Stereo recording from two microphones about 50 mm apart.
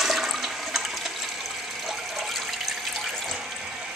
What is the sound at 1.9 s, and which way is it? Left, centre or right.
Water, centre.